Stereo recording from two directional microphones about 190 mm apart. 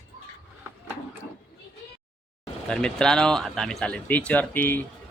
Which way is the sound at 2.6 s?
5° left (ahead or behind).